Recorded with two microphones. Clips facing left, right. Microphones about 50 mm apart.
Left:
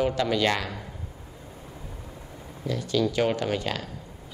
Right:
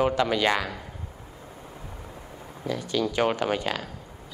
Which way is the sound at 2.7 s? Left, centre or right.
Centre.